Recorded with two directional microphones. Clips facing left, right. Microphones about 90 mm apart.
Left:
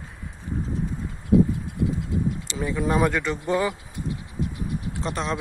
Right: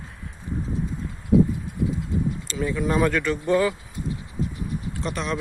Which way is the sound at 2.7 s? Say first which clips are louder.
Even; 25° left (ahead or behind).